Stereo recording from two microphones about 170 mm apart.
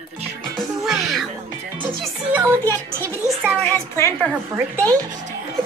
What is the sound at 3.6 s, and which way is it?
Speech, 15° left (ahead or behind).